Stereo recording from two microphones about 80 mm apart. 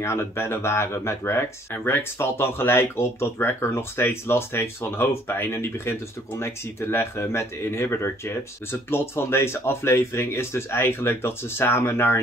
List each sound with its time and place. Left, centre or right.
0.0 s speech: left